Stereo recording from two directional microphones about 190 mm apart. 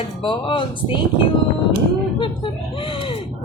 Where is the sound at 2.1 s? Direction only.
25° left (ahead or behind).